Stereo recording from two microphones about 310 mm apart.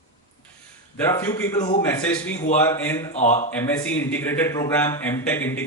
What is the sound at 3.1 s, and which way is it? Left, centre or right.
Speech, left.